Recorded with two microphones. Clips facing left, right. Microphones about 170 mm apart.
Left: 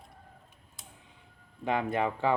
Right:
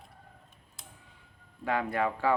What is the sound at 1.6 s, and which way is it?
Speech, 20° left (ahead or behind).